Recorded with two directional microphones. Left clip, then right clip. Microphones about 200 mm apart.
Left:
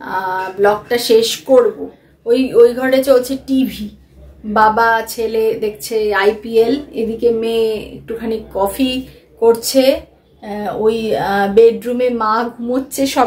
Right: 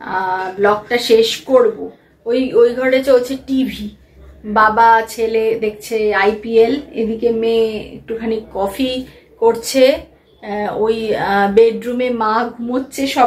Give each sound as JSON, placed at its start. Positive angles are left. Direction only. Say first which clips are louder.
{"t": 0.0, "sound": "a woman's voice", "louder": "right 1 dB", "side_deg": 10}